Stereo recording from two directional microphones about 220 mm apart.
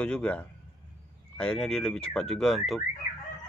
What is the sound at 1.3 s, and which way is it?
Car alarm, 5° left (ahead or behind).